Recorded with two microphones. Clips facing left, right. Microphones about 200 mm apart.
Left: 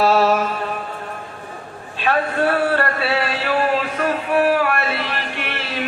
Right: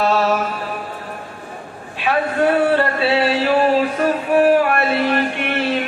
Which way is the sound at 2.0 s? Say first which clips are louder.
Right 2 dB; 20° right (ahead or behind).